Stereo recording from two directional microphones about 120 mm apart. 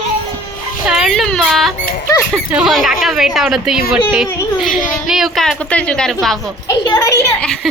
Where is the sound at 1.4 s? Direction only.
Centre (ahead or behind).